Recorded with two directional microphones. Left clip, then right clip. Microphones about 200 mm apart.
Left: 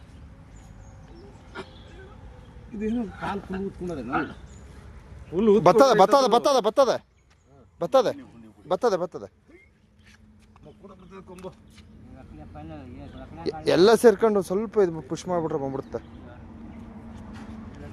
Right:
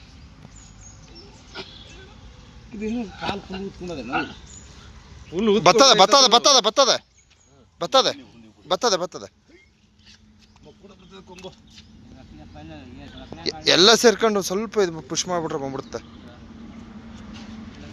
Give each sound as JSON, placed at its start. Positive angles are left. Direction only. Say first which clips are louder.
{"t": 2.8, "sound": "speech", "louder": "right 2 dB", "side_deg": 15}
{"t": 5.6, "sound": "speech", "louder": "right 4 dB", "side_deg": 20}
{"t": 11.1, "sound": "a sound", "louder": "right 1 dB", "side_deg": 15}
{"t": 12.5, "sound": "speech", "louder": "even", "side_deg": 15}
{"t": 13.4, "sound": "speech", "louder": "right 3 dB", "side_deg": 25}